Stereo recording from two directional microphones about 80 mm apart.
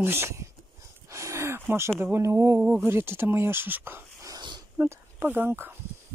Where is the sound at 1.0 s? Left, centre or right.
Right.